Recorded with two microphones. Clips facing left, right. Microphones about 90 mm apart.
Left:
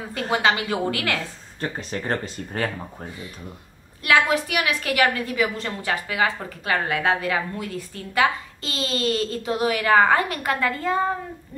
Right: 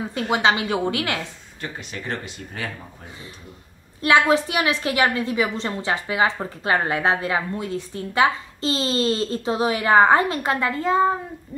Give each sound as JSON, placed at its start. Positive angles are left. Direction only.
{"t": 0.1, "sound": "a woman's voice", "side_deg": -25}
{"t": 1.6, "sound": "speech", "side_deg": 40}
{"t": 4.0, "sound": "a woman's voice", "side_deg": -30}